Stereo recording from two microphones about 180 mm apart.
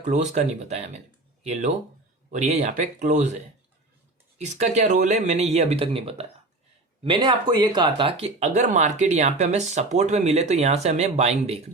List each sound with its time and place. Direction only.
0.0 s speech: 45° right (ahead or behind)
2.3 s speech: 40° right (ahead or behind)
4.4 s speech: 40° right (ahead or behind)